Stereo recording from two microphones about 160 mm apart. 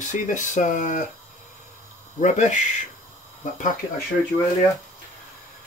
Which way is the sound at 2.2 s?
50° left (ahead or behind).